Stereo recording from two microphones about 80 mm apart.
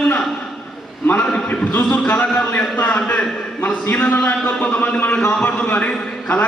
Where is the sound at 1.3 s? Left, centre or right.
Centre.